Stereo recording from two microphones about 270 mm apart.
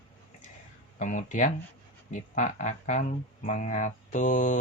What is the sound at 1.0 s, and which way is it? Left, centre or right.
Speech, left.